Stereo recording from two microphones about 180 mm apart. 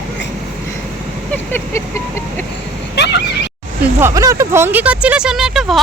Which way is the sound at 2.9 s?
70° left (ahead or behind).